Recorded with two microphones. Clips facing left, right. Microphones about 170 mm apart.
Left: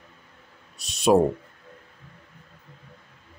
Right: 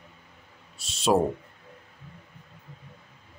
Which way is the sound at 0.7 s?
15° left (ahead or behind).